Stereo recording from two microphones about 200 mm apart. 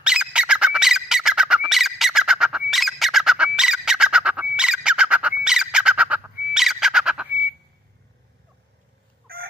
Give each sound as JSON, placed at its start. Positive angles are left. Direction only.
{"t": 0.0, "sound": "squeak", "side_deg": -5}
{"t": 6.5, "sound": "a sound", "side_deg": 0}
{"t": 9.3, "sound": "fowl", "side_deg": -50}